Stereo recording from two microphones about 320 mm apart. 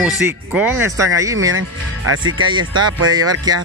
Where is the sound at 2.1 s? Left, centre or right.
Right.